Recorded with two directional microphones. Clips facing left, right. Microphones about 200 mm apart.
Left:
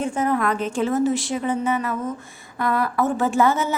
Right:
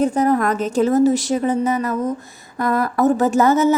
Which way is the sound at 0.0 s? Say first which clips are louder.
Right 5 dB; 40° right (ahead or behind).